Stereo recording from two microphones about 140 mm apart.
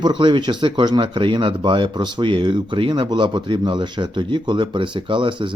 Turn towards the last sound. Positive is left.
turn(degrees=-35)  # may be behind; listen again after turning